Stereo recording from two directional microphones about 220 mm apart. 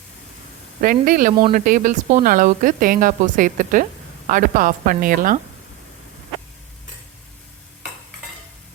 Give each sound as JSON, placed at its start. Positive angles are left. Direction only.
{"t": 0.8, "sound": "speech", "side_deg": -40}